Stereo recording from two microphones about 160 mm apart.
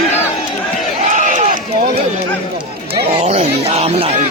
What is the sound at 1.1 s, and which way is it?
Run, 50° right (ahead or behind).